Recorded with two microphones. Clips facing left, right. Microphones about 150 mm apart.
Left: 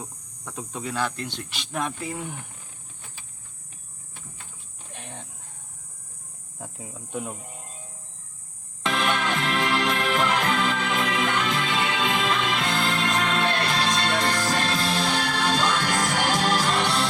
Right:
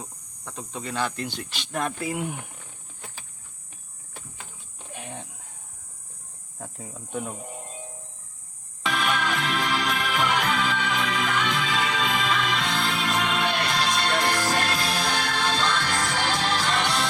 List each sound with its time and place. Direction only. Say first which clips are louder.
0.0 s speech: left 1 dB; 10° left (ahead or behind)
4.9 s a sound: right 3 dB; 5° right (ahead or behind)
6.6 s speech: even; centre (ahead or behind)
8.8 s music: left 1 dB; centre (ahead or behind)
14.3 s music: even; 15° right (ahead or behind)
14.7 s music: left 2 dB; centre (ahead or behind)
15.6 s music: left 2 dB; 45° left (ahead or behind)